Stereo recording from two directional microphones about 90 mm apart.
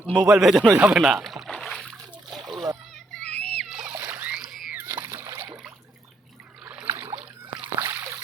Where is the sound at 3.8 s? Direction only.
25° right (ahead or behind).